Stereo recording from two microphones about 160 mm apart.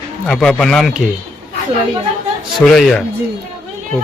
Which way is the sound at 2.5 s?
Centre (ahead or behind).